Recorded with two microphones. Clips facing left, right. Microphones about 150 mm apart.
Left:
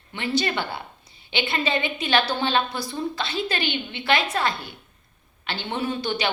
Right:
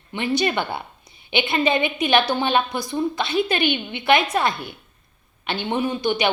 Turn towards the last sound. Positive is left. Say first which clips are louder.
# right 4 dB
turn(degrees=-15)  # may be behind; listen again after turning